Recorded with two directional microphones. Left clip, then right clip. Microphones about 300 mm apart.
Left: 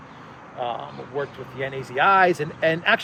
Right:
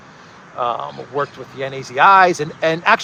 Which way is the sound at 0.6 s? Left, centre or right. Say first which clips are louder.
Right 8 dB; right.